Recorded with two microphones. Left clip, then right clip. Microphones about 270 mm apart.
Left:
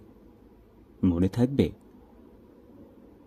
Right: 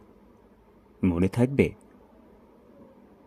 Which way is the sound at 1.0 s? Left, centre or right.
Centre.